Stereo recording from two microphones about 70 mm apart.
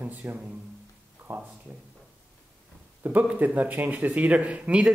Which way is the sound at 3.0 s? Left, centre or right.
Right.